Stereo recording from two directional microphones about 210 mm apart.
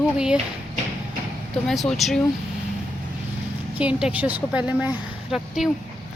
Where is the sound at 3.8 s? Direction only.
5° right (ahead or behind).